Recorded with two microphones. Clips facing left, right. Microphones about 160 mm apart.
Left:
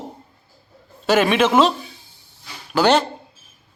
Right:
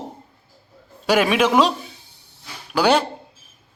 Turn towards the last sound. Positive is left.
turn(degrees=-10)  # may be behind; listen again after turning